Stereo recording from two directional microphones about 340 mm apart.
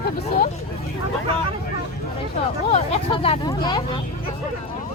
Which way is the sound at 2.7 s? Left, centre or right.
Centre.